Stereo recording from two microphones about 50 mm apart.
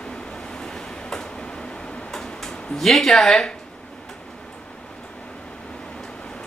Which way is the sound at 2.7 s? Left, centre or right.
Centre.